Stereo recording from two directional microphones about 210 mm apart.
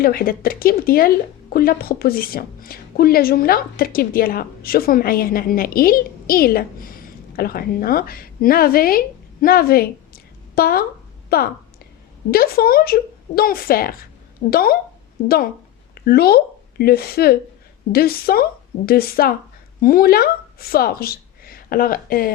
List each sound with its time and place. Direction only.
0.0 s a woman's voice: 45° left (ahead or behind)
16.0 s speech: 45° left (ahead or behind)